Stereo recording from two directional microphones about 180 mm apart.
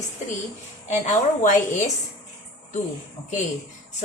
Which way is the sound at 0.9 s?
40° left (ahead or behind).